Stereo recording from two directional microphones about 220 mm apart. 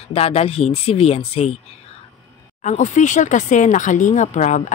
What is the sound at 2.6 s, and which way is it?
Speech, 35° left (ahead or behind).